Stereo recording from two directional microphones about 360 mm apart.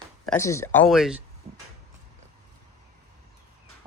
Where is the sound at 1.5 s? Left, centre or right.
Centre.